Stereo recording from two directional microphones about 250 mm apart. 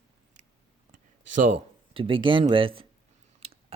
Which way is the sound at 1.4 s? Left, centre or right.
Right.